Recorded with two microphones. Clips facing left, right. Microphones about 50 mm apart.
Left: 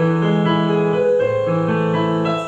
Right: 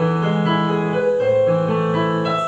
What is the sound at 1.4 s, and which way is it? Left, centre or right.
Music, centre.